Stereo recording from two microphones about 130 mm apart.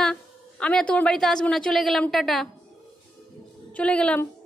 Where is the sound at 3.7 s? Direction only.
10° left (ahead or behind).